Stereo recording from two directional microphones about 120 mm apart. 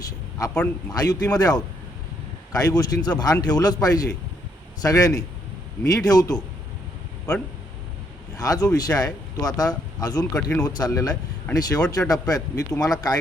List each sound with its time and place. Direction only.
0.0 s a sound: 30° left (ahead or behind)
0.9 s a man's voice: 30° left (ahead or behind)
8.4 s speech: 30° left (ahead or behind)